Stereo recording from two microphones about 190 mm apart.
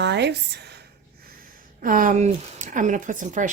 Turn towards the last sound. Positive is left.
turn(degrees=-40)  # may be behind; listen again after turning